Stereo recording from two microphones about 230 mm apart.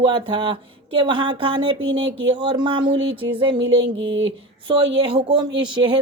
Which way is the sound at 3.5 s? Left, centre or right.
Right.